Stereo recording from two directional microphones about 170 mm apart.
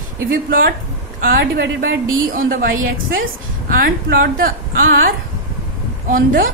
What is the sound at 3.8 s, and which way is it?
A woman's voice, 60° right (ahead or behind).